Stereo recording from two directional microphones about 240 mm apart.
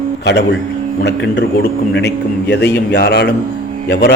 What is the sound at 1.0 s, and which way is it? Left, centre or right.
A man's voice, left.